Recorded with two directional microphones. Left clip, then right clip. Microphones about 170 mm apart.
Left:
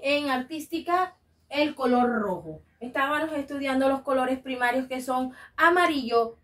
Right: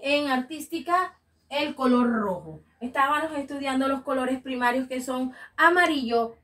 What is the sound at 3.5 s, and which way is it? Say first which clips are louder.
Speech: left 2 dB; 25° left (ahead or behind).